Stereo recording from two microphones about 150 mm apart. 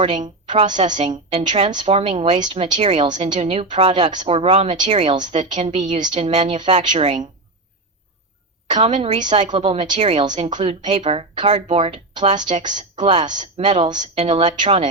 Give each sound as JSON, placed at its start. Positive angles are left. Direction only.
{"t": 0.7, "sound": "a woman's voice", "side_deg": -30}
{"t": 9.0, "sound": "a woman's voice", "side_deg": -35}
{"t": 10.2, "sound": "a woman's voice", "side_deg": -30}